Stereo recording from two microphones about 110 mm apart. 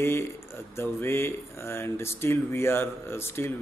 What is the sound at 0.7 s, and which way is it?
Speech, 20° left (ahead or behind).